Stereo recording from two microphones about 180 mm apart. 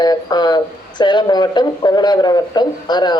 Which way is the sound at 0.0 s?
20° left (ahead or behind).